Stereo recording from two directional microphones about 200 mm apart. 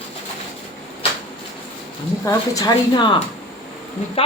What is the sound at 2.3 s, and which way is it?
Speech, 15° left (ahead or behind).